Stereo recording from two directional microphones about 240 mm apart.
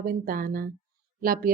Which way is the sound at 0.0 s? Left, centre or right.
Right.